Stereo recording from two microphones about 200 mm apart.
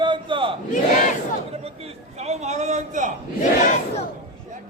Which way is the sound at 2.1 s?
35° right (ahead or behind).